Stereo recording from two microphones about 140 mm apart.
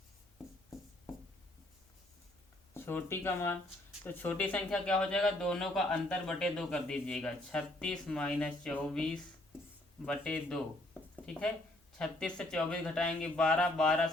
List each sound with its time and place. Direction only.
2.7 s speech: 15° left (ahead or behind)
11.9 s speech: 5° left (ahead or behind)